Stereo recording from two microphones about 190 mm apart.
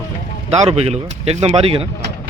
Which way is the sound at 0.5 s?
35° right (ahead or behind).